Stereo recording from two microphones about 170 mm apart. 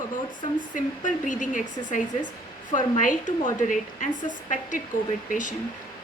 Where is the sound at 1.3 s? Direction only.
50° left (ahead or behind).